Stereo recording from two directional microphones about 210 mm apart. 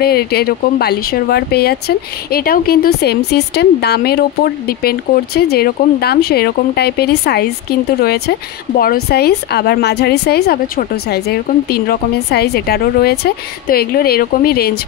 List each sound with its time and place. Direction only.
0.0 s speech: 50° left (ahead or behind)
8.7 s speech: 45° left (ahead or behind)